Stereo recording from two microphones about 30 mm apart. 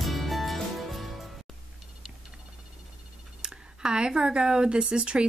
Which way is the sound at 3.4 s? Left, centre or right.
Right.